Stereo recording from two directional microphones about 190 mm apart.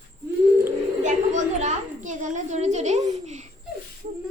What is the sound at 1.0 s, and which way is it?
A child's voice, 40° right (ahead or behind).